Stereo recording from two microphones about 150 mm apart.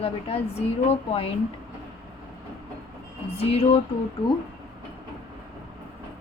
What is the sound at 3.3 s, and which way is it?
Speech, 40° left (ahead or behind).